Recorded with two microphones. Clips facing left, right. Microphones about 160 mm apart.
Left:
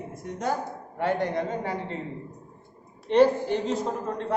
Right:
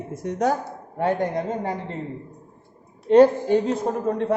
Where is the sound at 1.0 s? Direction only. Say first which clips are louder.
Right 3 dB; 45° right (ahead or behind).